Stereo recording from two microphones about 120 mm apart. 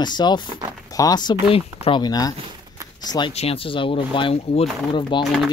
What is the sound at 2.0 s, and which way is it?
Speech, 35° left (ahead or behind).